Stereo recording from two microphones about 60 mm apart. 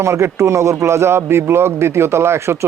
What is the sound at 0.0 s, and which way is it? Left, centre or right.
A man's voice, right.